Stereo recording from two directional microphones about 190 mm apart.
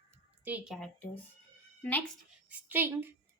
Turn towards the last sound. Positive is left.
turn(degrees=-10)  # may be behind; listen again after turning